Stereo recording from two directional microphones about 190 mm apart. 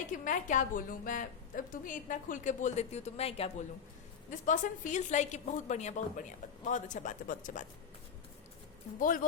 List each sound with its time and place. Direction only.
0.1 s a woman's voice: 45° left (ahead or behind)
4.3 s a woman's voice: 40° left (ahead or behind)
9.0 s a woman's voice: 45° left (ahead or behind)